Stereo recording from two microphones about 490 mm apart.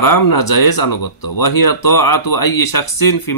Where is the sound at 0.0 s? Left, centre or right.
Left.